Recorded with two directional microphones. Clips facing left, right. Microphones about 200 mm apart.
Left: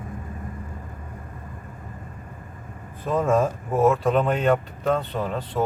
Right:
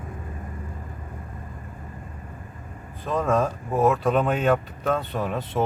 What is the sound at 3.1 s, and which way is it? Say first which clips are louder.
Speech: left 2 dB; 5° left (ahead or behind).